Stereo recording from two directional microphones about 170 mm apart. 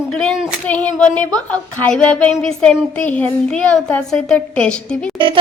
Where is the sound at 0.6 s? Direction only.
10° left (ahead or behind).